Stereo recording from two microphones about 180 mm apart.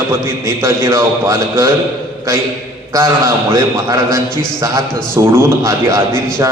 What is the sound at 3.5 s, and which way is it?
A man's voice, 20° right (ahead or behind).